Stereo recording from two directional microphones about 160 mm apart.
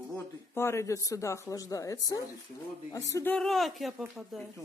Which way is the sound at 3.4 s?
Centre (ahead or behind).